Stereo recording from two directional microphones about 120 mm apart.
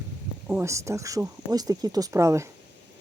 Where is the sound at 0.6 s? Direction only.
25° right (ahead or behind).